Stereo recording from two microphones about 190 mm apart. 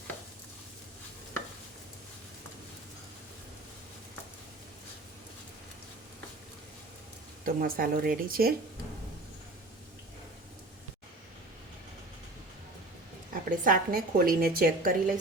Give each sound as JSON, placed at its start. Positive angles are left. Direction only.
{"t": 7.4, "sound": "a woman's voice", "side_deg": -50}
{"t": 13.3, "sound": "a woman's voice", "side_deg": -50}